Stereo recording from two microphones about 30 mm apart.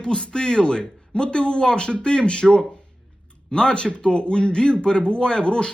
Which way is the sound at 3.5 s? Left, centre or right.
Left.